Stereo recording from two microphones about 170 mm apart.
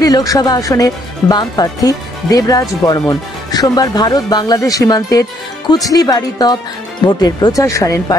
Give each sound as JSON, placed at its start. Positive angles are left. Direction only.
{"t": 0.0, "sound": "speech", "side_deg": 20}